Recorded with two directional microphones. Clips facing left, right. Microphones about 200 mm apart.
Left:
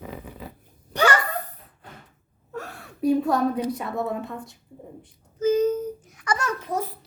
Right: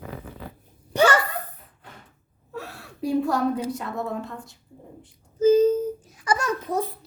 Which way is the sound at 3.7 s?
5° left (ahead or behind).